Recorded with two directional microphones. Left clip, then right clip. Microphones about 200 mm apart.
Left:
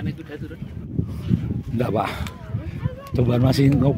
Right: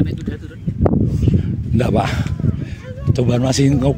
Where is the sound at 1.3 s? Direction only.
25° right (ahead or behind).